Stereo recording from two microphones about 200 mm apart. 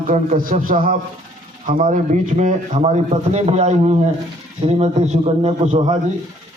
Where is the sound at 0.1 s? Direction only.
45° right (ahead or behind).